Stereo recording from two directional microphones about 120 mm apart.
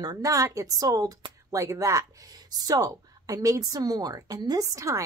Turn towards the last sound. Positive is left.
turn(degrees=-25)  # may be behind; listen again after turning